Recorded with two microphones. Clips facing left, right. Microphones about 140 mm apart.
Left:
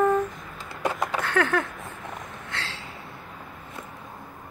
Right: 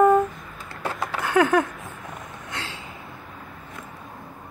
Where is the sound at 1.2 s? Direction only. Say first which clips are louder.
Right 7 dB; 10° right (ahead or behind).